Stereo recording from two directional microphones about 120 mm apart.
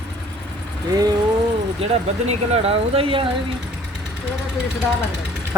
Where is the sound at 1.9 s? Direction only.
60° right (ahead or behind).